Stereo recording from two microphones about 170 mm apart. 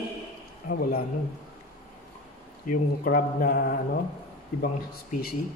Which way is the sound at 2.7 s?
55° left (ahead or behind).